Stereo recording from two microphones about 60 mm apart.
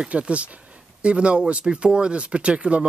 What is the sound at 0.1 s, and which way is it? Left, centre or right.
Speech, centre.